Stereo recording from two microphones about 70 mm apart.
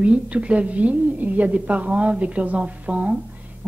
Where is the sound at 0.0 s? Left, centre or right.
Centre.